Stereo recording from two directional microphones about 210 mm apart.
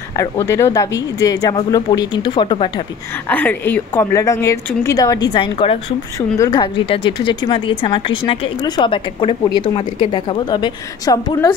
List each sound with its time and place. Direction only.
0.1 s a woman's voice: 15° left (ahead or behind)
3.3 s a woman's voice: 10° left (ahead or behind)